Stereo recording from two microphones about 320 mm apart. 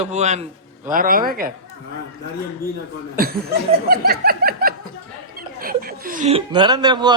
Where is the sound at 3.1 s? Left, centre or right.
Right.